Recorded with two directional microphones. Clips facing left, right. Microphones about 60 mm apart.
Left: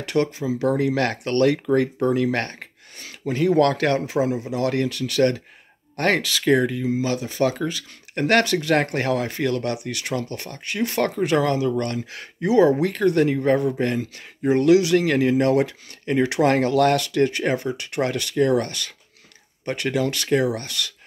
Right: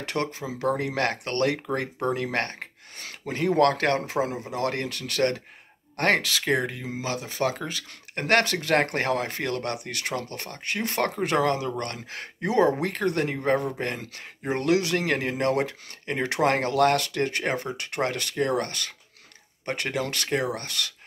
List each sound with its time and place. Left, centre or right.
0.0 s speech: right